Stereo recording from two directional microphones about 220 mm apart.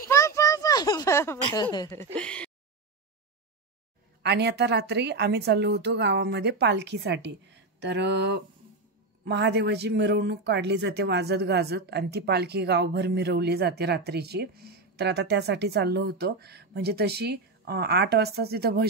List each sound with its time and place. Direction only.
0.1 s speech: 15° left (ahead or behind)
4.2 s speech: 50° right (ahead or behind)